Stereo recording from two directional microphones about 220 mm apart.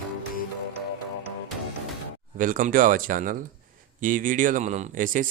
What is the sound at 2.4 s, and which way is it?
Speech, 35° right (ahead or behind).